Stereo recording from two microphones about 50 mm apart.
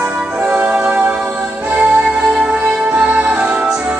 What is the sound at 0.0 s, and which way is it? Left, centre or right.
Music, right.